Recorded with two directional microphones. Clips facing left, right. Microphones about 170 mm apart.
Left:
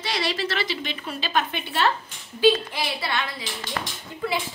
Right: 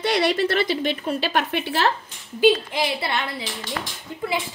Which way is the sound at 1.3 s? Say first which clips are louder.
Right 2 dB; 70° right (ahead or behind).